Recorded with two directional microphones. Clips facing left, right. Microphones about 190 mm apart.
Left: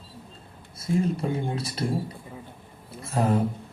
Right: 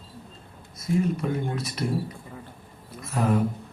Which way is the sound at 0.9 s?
30° left (ahead or behind).